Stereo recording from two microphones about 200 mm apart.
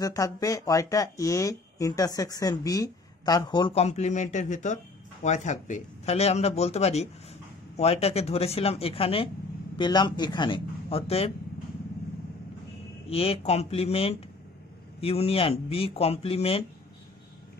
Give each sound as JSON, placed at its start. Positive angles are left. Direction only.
{"t": 0.0, "sound": "speech", "side_deg": 15}
{"t": 13.1, "sound": "speech", "side_deg": 30}